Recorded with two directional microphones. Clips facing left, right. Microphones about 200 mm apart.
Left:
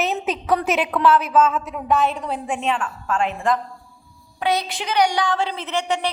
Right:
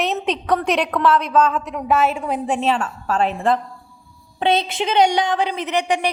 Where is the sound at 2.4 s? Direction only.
35° right (ahead or behind).